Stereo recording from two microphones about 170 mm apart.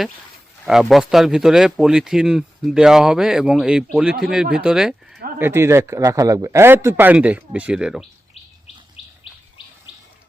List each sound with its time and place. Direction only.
0.6 s speech: centre (ahead or behind)
5.4 s a man's voice: 15° right (ahead or behind)
9.0 s bird: 35° left (ahead or behind)